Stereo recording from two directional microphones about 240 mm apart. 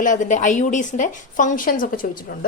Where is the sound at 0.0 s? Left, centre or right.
Left.